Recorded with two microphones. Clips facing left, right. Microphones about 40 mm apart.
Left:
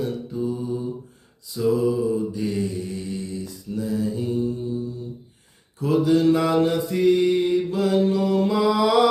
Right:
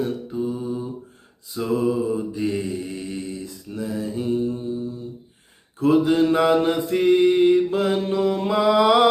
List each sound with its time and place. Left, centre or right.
0.3 s mantra: right
5.8 s mantra: right